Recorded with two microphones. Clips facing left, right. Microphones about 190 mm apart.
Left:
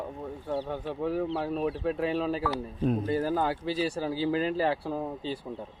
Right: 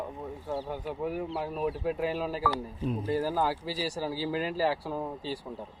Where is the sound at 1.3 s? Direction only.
30° left (ahead or behind).